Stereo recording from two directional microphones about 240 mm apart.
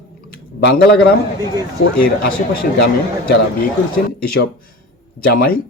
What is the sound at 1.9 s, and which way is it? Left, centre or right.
Speech, left.